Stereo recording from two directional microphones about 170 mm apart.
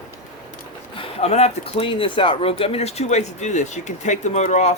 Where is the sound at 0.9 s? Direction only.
40° left (ahead or behind).